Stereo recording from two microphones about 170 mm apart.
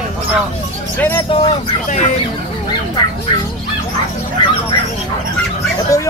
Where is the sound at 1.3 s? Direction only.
35° left (ahead or behind).